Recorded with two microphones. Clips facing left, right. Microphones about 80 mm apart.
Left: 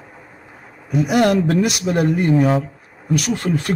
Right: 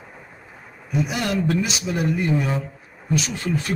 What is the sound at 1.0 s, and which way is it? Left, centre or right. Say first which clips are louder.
A man's voice: left 8 dB; left.